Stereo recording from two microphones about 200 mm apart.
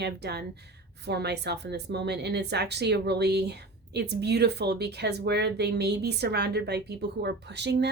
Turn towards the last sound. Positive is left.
turn(degrees=-55)  # may be behind; listen again after turning